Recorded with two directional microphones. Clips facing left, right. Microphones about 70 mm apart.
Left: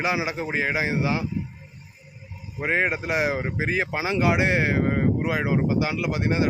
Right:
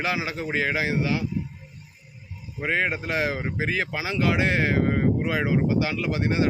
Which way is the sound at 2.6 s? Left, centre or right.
Centre.